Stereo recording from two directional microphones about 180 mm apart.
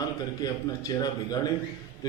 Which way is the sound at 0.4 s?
20° left (ahead or behind).